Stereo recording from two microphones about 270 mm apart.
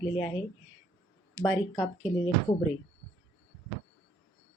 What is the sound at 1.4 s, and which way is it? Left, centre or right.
Speech, centre.